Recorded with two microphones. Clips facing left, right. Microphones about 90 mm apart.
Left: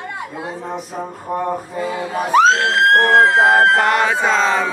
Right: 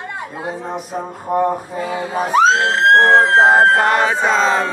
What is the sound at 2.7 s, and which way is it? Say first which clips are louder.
Music: right 2 dB; 30° right (ahead or behind).